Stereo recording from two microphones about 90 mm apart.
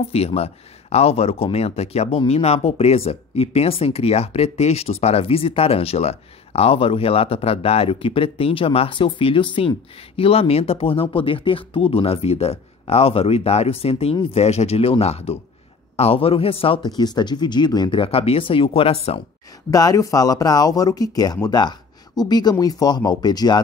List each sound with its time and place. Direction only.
0.1 s speech: 90° left
16.8 s speech: 50° left (ahead or behind)
17.9 s speech: 90° left
19.7 s speech: 40° left (ahead or behind)